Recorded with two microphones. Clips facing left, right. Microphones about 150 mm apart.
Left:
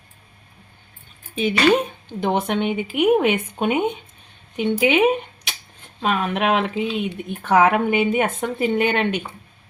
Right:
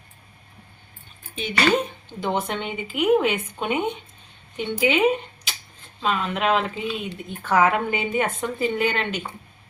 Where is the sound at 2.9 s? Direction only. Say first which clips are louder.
Left 2 dB; 60° left (ahead or behind).